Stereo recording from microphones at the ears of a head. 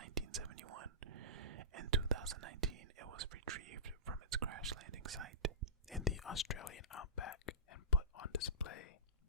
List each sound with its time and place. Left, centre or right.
0.0 s whispering: right
6.2 s whispering: left